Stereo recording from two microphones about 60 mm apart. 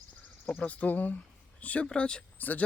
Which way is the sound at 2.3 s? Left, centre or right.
Left.